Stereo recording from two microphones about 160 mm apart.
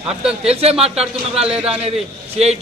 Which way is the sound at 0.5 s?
40° right (ahead or behind).